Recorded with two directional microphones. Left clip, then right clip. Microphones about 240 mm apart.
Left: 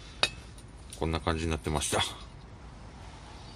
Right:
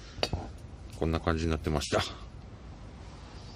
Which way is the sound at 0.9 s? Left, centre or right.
Centre.